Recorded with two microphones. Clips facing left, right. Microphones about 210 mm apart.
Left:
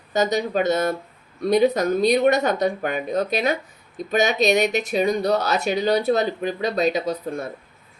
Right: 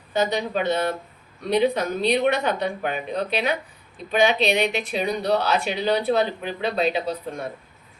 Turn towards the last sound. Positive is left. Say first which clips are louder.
# left 2 dB
turn(degrees=40)  # may be behind; listen again after turning